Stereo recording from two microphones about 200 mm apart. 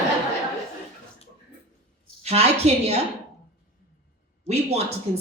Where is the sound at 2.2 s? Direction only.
30° right (ahead or behind).